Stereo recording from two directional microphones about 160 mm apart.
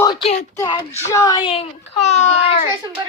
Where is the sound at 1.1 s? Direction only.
20° left (ahead or behind).